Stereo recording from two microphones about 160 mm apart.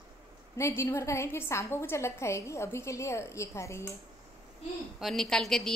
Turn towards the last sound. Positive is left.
turn(degrees=0)  # may be behind; listen again after turning